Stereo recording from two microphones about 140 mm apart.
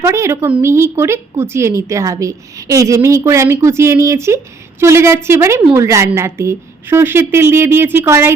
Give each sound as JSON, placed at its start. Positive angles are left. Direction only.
{"t": 0.0, "sound": "a woman's voice", "side_deg": -20}